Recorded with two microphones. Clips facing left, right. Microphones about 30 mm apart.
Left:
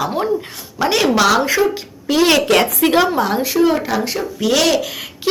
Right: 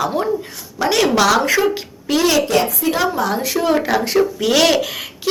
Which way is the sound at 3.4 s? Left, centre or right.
Centre.